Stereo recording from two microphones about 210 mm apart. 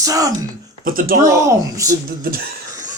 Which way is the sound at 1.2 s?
15° right (ahead or behind).